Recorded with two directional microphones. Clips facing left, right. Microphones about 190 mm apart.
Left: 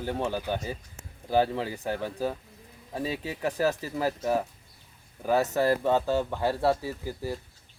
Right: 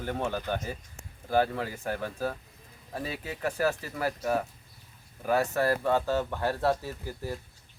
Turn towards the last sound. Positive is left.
turn(degrees=10)  # may be behind; listen again after turning